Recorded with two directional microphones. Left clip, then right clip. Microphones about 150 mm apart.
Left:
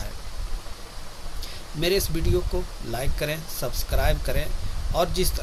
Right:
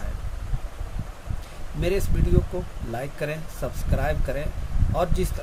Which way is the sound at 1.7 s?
5° right (ahead or behind).